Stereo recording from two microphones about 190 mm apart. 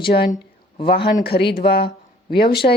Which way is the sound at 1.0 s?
55° left (ahead or behind).